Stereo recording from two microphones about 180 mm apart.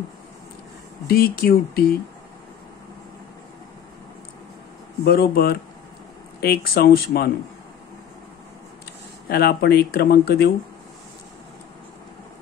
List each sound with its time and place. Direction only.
1.0 s speech: 55° left (ahead or behind)
5.0 s speech: 60° left (ahead or behind)
9.3 s speech: 60° left (ahead or behind)